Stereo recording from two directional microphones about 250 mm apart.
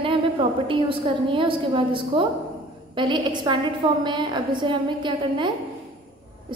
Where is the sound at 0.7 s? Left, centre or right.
Right.